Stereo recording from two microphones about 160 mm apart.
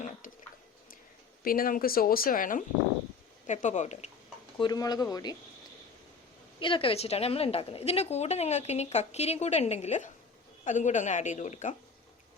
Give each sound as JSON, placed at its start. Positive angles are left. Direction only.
{"t": 0.0, "sound": "a sound", "side_deg": 50}
{"t": 1.5, "sound": "speech", "side_deg": 65}
{"t": 3.4, "sound": "a woman's voice", "side_deg": 50}
{"t": 4.5, "sound": "speech", "side_deg": 25}
{"t": 6.6, "sound": "a woman's voice", "side_deg": 30}